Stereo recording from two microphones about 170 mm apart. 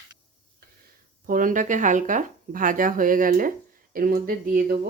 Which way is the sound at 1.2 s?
55° right (ahead or behind).